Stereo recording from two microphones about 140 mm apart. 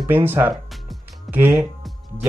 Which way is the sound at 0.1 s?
15° right (ahead or behind).